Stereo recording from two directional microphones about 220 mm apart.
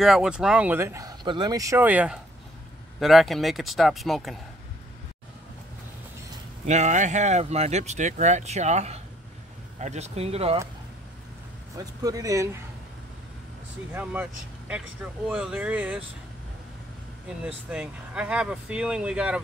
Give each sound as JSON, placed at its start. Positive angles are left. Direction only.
{"t": 0.0, "sound": "speech", "side_deg": 0}
{"t": 6.6, "sound": "speech", "side_deg": -30}
{"t": 11.7, "sound": "speech", "side_deg": -15}
{"t": 15.2, "sound": "speech", "side_deg": -5}
{"t": 17.5, "sound": "speech", "side_deg": -5}